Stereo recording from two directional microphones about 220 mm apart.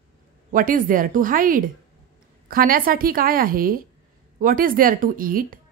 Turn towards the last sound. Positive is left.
turn(degrees=-40)  # may be behind; listen again after turning